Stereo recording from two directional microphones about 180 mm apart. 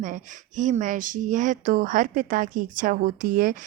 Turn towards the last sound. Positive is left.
turn(degrees=-50)  # may be behind; listen again after turning